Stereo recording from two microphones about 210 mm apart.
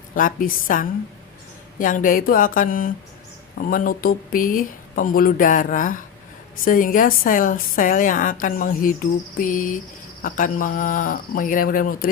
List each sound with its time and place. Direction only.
0.1 s speech: 40° left (ahead or behind)